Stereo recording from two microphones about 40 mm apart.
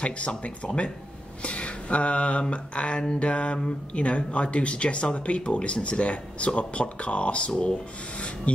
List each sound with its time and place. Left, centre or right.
0.0 s speech: left